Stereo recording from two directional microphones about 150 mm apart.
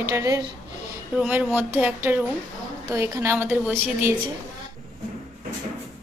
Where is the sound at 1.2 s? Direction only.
10° right (ahead or behind).